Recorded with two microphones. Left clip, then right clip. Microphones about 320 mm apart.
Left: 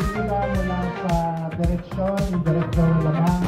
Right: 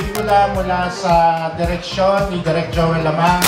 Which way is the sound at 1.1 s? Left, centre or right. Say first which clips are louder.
Right 14 dB; centre.